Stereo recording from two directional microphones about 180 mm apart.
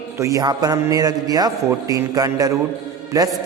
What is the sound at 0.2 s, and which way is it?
A man's voice, 15° right (ahead or behind).